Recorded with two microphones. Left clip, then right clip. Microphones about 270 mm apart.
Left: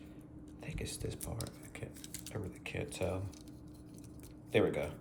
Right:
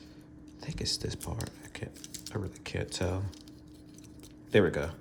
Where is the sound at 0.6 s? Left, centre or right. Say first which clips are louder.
Right 5 dB; right.